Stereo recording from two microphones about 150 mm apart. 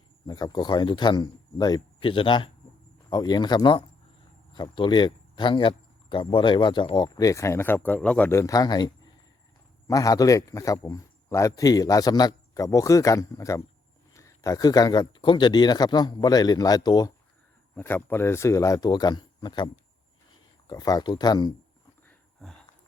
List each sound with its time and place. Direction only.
0.3 s speech: 25° left (ahead or behind)
17.7 s speech: 15° left (ahead or behind)
22.0 s a sound: 5° left (ahead or behind)